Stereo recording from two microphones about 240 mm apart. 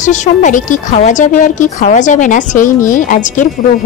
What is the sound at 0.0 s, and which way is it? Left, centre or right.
Speech, left.